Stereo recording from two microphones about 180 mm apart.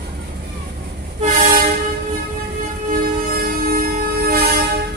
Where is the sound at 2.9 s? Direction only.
55° right (ahead or behind).